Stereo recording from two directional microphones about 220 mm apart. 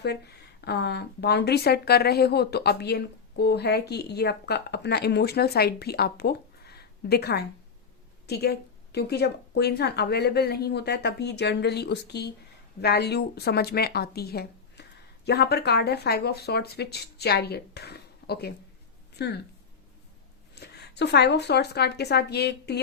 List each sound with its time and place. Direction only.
0.0 s speech: 50° left (ahead or behind)
20.6 s speech: 50° left (ahead or behind)